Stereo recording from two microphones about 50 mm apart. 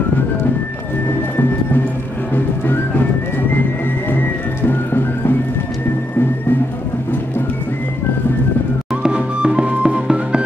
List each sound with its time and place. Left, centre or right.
2.3 s music: left
4.6 s music: left
9.0 s music: centre